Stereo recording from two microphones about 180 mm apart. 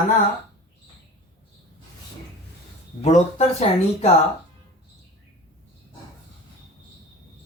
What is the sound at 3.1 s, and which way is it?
Speech, 40° left (ahead or behind).